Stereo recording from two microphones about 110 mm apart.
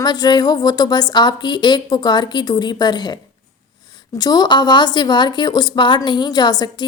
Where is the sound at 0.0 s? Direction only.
40° left (ahead or behind).